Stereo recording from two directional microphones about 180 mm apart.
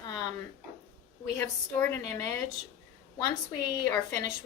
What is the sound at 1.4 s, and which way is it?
A woman's voice, 15° left (ahead or behind).